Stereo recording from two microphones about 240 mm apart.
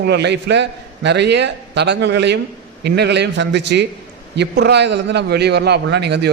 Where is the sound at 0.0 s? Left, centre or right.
Right.